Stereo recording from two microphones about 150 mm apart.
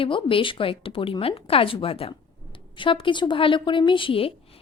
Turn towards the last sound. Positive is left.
turn(degrees=40)  # may be behind; listen again after turning